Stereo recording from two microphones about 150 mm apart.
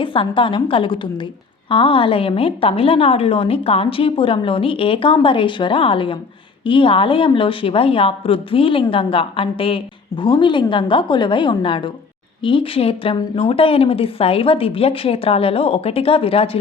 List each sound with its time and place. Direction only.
0.0 s a woman's voice: 35° left (ahead or behind)